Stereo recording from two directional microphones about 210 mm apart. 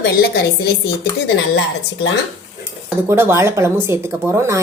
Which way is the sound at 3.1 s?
10° right (ahead or behind).